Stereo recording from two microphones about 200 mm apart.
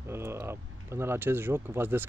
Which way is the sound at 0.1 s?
10° right (ahead or behind).